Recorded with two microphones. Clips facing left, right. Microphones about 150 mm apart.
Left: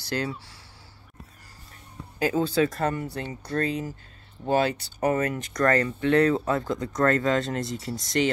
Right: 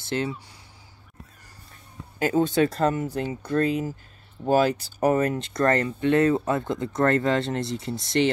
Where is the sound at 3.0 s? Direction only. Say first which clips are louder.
Right 5 dB; 10° right (ahead or behind).